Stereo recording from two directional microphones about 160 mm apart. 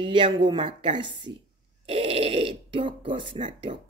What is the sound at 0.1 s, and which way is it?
Speech, 30° right (ahead or behind).